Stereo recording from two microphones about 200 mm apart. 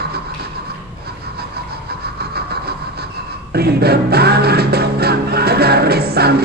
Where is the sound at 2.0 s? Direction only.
55° right (ahead or behind).